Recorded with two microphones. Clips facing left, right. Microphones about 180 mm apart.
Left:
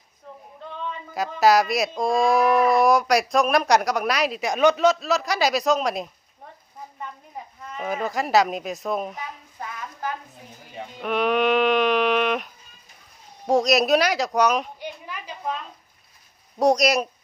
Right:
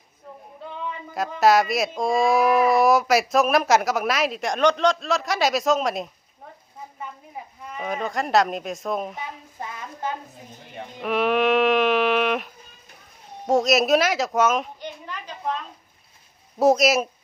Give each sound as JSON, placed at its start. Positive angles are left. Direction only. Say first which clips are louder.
{"t": 0.3, "sound": "female singing", "louder": "even", "side_deg": 0}
{"t": 1.1, "sound": "speech", "louder": "even", "side_deg": 0}
{"t": 7.9, "sound": "speech", "louder": "left 1 dB", "side_deg": 5}
{"t": 9.6, "sound": "speech", "louder": "even", "side_deg": -25}
{"t": 10.6, "sound": "sheep", "louder": "even", "side_deg": 0}
{"t": 13.5, "sound": "speech", "louder": "even", "side_deg": 0}
{"t": 14.8, "sound": "a sound", "louder": "even", "side_deg": 10}
{"t": 16.6, "sound": "speech", "louder": "right 1 dB", "side_deg": -5}